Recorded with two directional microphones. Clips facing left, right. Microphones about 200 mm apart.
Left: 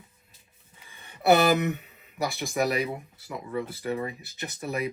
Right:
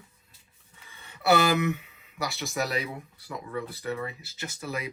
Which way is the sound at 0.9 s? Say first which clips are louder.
Left 3 dB; 20° left (ahead or behind).